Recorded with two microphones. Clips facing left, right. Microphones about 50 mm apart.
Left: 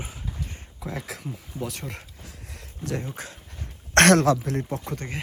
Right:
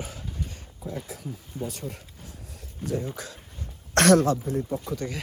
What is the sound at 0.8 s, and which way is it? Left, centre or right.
Speech, left.